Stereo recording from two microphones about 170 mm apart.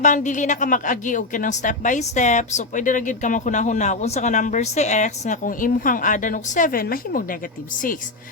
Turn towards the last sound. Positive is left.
turn(degrees=55)  # may be behind; listen again after turning